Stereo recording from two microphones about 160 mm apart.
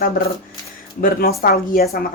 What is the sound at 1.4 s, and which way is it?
Speech, 65° left (ahead or behind).